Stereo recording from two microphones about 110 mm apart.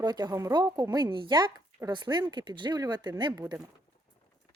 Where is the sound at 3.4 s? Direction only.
10° right (ahead or behind).